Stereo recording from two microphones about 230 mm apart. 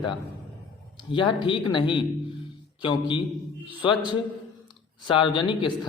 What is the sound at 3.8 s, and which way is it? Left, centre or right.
Speech, centre.